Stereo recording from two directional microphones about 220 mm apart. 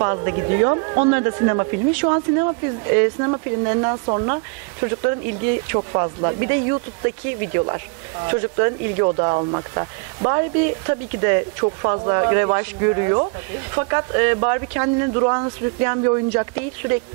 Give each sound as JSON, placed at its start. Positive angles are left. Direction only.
{"t": 0.0, "sound": "speech", "side_deg": -20}
{"t": 5.8, "sound": "speech", "side_deg": -25}